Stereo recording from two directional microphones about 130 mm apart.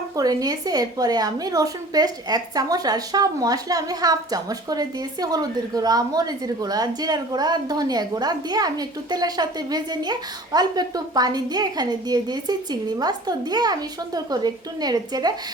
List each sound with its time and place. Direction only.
0.2 s a woman's voice: 30° right (ahead or behind)